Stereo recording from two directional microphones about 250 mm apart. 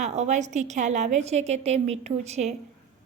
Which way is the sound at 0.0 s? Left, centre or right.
Right.